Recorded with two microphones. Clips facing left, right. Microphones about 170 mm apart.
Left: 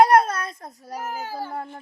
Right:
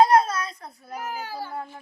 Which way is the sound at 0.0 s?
60° left (ahead or behind).